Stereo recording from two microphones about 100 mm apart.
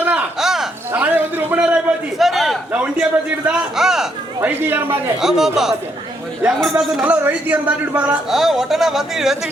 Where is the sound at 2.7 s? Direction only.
15° right (ahead or behind).